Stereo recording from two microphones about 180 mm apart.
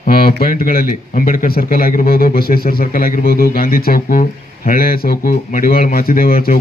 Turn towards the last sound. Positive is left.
turn(degrees=55)  # may be behind; listen again after turning